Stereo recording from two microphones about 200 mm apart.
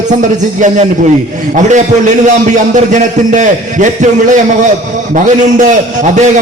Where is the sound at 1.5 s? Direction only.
35° right (ahead or behind).